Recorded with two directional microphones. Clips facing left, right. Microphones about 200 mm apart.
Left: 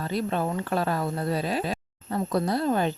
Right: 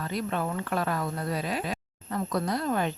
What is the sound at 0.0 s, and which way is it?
Speech, 30° left (ahead or behind).